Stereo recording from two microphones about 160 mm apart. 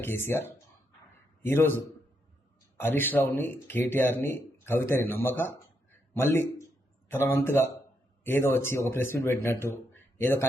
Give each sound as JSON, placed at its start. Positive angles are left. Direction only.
{"t": 0.0, "sound": "a man's voice", "side_deg": 15}